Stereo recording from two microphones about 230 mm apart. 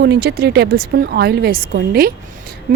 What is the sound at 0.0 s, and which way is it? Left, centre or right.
A woman's voice, right.